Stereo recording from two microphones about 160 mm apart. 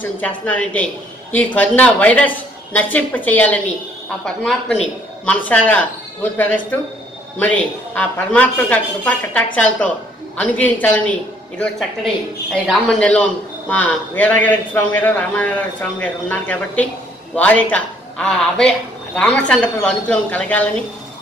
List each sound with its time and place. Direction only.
0.0 s speech: 10° left (ahead or behind)